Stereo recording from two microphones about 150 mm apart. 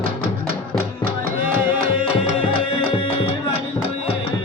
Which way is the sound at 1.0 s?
75° right (ahead or behind).